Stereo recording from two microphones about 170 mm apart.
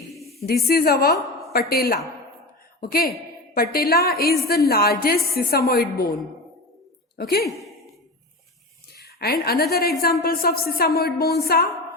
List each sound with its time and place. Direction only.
0.7 s a woman's voice: 65° left (ahead or behind)
7.2 s a woman's voice: 65° left (ahead or behind)
8.9 s a sound: 65° left (ahead or behind)
10.0 s a woman's voice: 65° left (ahead or behind)